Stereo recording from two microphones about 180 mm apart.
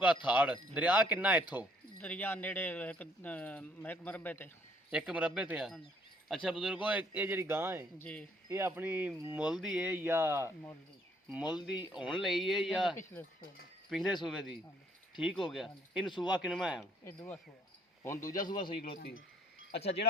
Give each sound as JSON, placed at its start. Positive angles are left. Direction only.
{"t": 0.3, "sound": "speech", "side_deg": -10}
{"t": 2.0, "sound": "speech", "side_deg": 10}
{"t": 4.9, "sound": "speech", "side_deg": -5}
{"t": 7.9, "sound": "speech", "side_deg": 10}
{"t": 8.4, "sound": "speech", "side_deg": -15}
{"t": 17.0, "sound": "speech", "side_deg": 15}
{"t": 18.9, "sound": "speech", "side_deg": 65}